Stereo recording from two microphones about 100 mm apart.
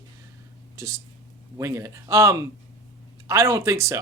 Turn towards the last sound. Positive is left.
turn(degrees=-30)  # may be behind; listen again after turning